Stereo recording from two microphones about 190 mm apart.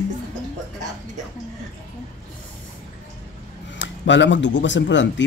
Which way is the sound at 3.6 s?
70° left (ahead or behind).